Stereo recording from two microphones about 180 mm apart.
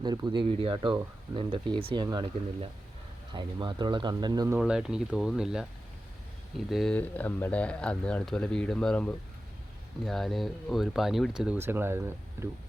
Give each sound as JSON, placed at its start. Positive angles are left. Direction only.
{"t": 0.0, "sound": "speech", "side_deg": -25}
{"t": 4.5, "sound": "speech", "side_deg": -5}
{"t": 6.7, "sound": "speech", "side_deg": 0}